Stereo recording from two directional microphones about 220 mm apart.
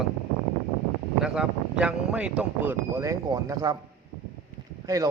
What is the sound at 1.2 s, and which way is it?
Speech, 5° right (ahead or behind).